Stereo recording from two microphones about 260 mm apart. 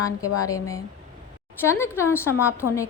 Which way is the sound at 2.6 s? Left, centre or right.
Left.